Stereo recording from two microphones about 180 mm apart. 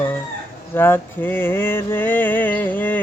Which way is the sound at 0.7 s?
10° left (ahead or behind).